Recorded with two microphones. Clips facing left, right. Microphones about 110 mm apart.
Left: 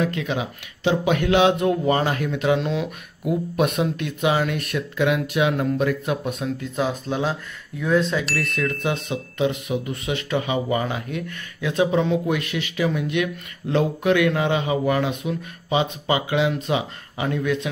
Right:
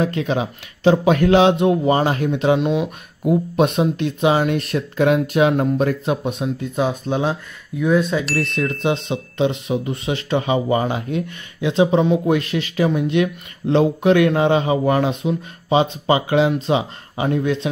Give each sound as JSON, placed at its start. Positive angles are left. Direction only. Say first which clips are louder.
{"t": 0.0, "sound": "speech", "louder": "right 4 dB", "side_deg": -35}
{"t": 8.4, "sound": "speech", "louder": "right 4 dB", "side_deg": -25}
{"t": 12.4, "sound": "speech", "louder": "right 5 dB", "side_deg": -35}